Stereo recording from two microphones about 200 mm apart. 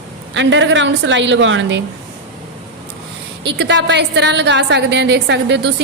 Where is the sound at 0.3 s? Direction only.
70° right (ahead or behind).